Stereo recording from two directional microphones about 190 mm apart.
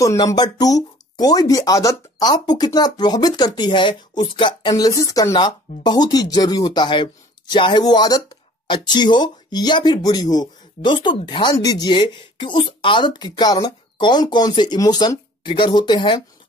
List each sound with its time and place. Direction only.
0.0 s speech: 15° left (ahead or behind)